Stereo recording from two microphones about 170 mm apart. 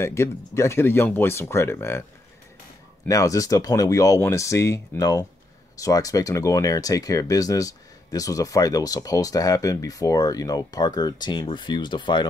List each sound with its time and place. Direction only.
0.0 s speech: 15° left (ahead or behind)
3.1 s speech: 20° left (ahead or behind)